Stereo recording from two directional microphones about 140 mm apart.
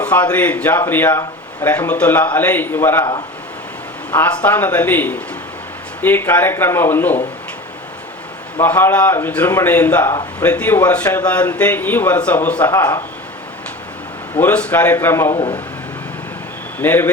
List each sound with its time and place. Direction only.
0.0 s a man's voice: 10° left (ahead or behind)
4.4 s a man's voice: 10° left (ahead or behind)
8.6 s a man's voice: 15° left (ahead or behind)
14.3 s a man's voice: 10° left (ahead or behind)
15.4 s speech: 40° left (ahead or behind)
16.8 s a man's voice: 15° left (ahead or behind)